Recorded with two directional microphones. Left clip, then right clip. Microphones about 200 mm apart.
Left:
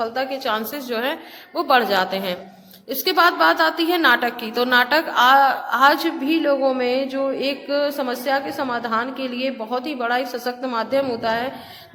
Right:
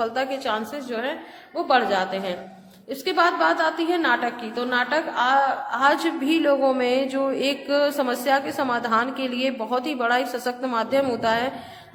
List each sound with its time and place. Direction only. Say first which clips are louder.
0.0 s a woman's voice: left 1 dB; 10° left (ahead or behind)